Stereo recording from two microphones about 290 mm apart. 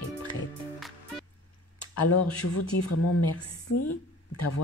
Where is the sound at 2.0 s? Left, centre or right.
Left.